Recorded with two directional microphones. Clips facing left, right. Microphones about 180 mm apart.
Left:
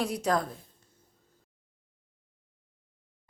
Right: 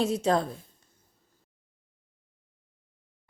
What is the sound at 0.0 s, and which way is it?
Speech, 25° right (ahead or behind).